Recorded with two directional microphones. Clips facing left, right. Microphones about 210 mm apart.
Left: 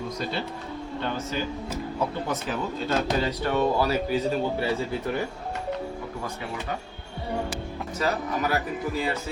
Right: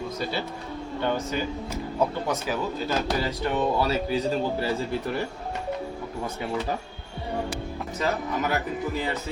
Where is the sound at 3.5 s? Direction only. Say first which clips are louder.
Left 1 dB; 20° right (ahead or behind).